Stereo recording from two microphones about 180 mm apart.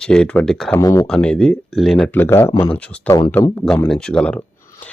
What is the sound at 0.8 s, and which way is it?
Speech, 20° left (ahead or behind).